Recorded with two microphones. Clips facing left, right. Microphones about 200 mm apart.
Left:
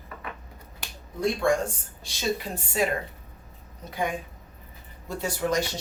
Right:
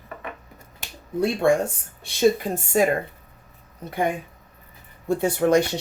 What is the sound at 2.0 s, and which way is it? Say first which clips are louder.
Speech: right 10 dB; 50° right (ahead or behind).